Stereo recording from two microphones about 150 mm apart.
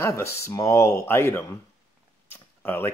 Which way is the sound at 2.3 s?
15° left (ahead or behind).